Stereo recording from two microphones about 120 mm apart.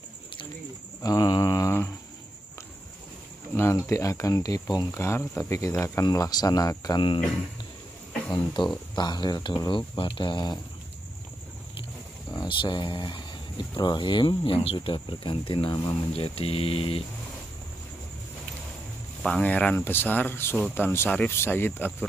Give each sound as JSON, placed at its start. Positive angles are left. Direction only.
{"t": 1.0, "sound": "mantra", "side_deg": 30}
{"t": 3.5, "sound": "speech", "side_deg": 25}
{"t": 5.5, "sound": "cricket", "side_deg": 25}
{"t": 6.0, "sound": "speech", "side_deg": 30}
{"t": 8.3, "sound": "speech", "side_deg": 40}
{"t": 12.4, "sound": "speech", "side_deg": 40}
{"t": 15.7, "sound": "speech", "side_deg": 35}
{"t": 16.2, "sound": "speech", "side_deg": 55}
{"t": 19.2, "sound": "speech", "side_deg": 10}